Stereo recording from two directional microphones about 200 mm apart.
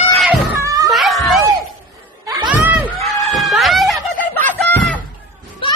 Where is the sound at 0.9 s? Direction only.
Centre (ahead or behind).